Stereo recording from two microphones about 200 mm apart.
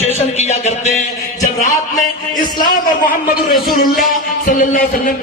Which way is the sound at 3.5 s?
45° left (ahead or behind).